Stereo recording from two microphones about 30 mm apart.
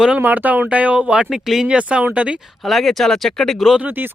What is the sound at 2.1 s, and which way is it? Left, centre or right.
Speech, right.